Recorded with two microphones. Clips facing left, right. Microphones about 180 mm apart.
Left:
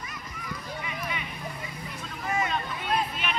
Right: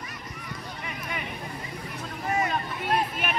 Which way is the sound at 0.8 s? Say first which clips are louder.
Even; 45° right (ahead or behind).